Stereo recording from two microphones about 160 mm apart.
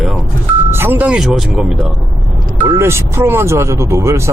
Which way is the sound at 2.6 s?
15° right (ahead or behind).